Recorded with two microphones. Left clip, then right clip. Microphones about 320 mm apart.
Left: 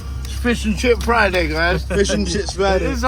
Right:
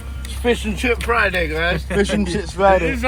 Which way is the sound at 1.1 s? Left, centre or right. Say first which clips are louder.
Left 2 dB; centre.